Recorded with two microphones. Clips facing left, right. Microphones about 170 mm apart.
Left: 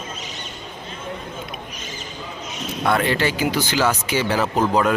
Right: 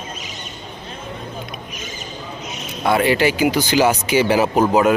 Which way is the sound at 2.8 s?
10° right (ahead or behind).